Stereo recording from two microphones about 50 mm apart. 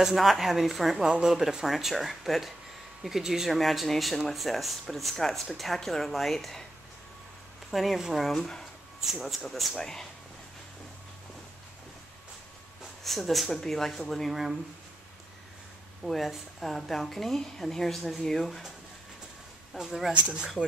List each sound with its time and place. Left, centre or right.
0.0 s a woman's voice: centre
1.0 s a woman's voice: centre
7.7 s a woman's voice: centre
8.4 s speech: centre
9.0 s a woman's voice: centre
9.8 s speech: centre
13.0 s a woman's voice: centre
16.0 s a woman's voice: centre
19.7 s a woman's voice: centre
20.1 s speech: right